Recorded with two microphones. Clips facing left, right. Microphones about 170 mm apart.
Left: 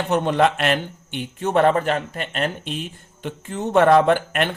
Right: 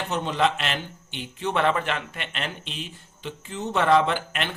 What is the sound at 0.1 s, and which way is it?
Speech, 55° left (ahead or behind).